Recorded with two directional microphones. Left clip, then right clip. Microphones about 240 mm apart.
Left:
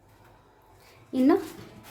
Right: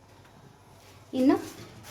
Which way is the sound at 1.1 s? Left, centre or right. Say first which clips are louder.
Left 2 dB; centre.